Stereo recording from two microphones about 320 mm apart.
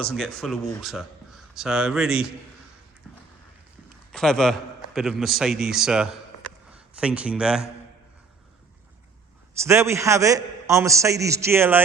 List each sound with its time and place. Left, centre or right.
0.0 s a man's voice: centre
4.1 s a man's voice: centre
9.6 s a man's voice: centre